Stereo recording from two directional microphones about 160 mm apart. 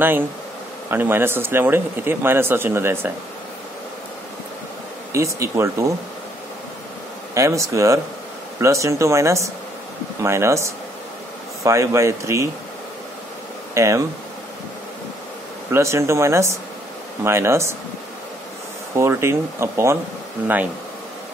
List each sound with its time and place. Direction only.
0.8 s a man's voice: 10° right (ahead or behind)
5.1 s speech: 20° right (ahead or behind)
7.3 s a man's voice: 20° right (ahead or behind)
13.7 s speech: 20° right (ahead or behind)
15.7 s a man's voice: 15° right (ahead or behind)
18.9 s a man's voice: 15° right (ahead or behind)